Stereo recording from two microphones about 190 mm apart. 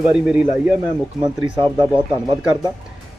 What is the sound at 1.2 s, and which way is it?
Speech, 25° right (ahead or behind).